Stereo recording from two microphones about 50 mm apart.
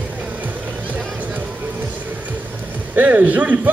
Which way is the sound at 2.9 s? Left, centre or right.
Right.